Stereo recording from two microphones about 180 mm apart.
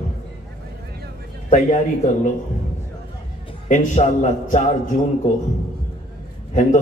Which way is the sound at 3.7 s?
40° left (ahead or behind).